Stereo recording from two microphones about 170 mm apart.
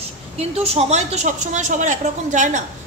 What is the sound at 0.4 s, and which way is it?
A woman's voice, 35° right (ahead or behind).